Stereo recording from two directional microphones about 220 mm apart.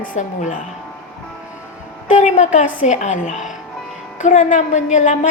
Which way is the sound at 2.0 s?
35° left (ahead or behind).